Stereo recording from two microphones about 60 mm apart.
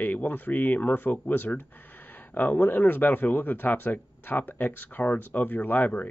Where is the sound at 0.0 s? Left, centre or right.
Left.